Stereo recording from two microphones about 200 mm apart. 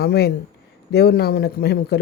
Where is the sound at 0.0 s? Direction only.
55° left (ahead or behind).